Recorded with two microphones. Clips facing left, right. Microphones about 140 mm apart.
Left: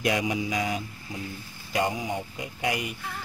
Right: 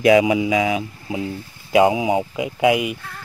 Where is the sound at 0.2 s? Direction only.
90° right.